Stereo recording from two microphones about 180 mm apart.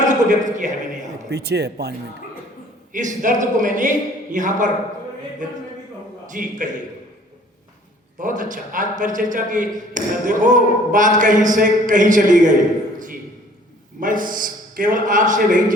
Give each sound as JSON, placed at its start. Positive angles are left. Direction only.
{"t": 0.0, "sound": "a man's voice", "side_deg": -45}
{"t": 1.3, "sound": "speech", "side_deg": -65}
{"t": 2.9, "sound": "a man's voice", "side_deg": -45}
{"t": 6.2, "sound": "a man's voice", "side_deg": -45}
{"t": 8.2, "sound": "a man's voice", "side_deg": -45}
{"t": 14.0, "sound": "a man's voice", "side_deg": -50}